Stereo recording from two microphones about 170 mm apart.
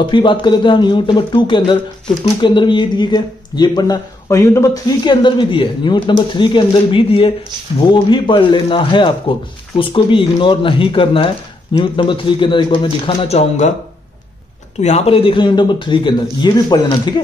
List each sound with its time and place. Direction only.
0.0 s speech: 30° left (ahead or behind)
14.8 s speech: 40° left (ahead or behind)